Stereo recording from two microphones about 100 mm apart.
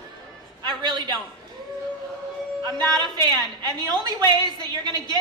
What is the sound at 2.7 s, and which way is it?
A woman's voice, 45° right (ahead or behind).